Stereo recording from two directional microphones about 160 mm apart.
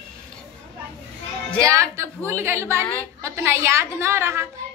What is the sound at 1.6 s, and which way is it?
A woman's voice, 20° right (ahead or behind).